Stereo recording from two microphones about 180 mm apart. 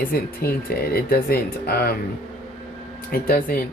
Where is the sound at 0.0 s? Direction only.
55° left (ahead or behind).